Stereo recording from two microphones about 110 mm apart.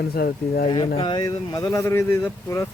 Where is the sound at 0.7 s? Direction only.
45° left (ahead or behind).